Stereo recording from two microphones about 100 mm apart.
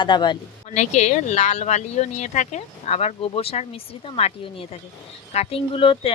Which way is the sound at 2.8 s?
90° left.